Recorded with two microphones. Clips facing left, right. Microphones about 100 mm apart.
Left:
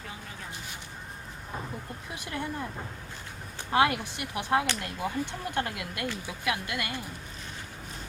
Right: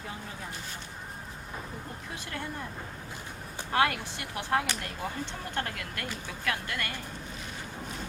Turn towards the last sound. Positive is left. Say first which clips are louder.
# left 2 dB
turn(degrees=15)  # may be behind; listen again after turning